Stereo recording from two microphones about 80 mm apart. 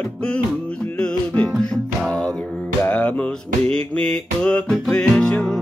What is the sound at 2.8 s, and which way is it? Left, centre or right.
Music, centre.